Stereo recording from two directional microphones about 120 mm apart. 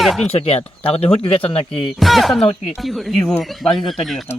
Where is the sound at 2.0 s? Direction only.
Centre (ahead or behind).